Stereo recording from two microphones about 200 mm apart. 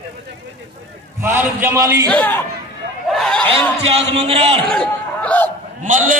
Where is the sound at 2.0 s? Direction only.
10° left (ahead or behind).